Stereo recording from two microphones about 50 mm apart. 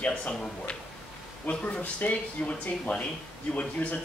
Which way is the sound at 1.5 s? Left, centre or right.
Left.